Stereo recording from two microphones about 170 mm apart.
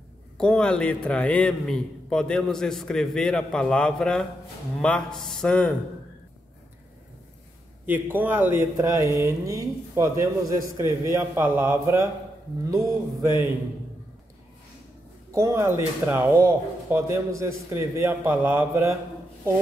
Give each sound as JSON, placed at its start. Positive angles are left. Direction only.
{"t": 0.4, "sound": "a man's voice", "side_deg": 5}
{"t": 7.8, "sound": "speech", "side_deg": -10}
{"t": 15.3, "sound": "speech", "side_deg": -15}